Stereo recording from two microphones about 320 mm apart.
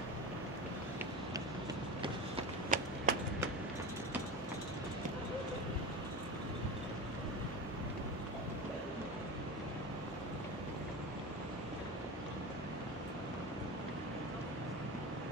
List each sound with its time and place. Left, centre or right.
2.3 s run: right